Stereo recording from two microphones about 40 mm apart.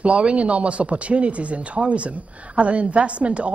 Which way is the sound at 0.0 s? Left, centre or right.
Right.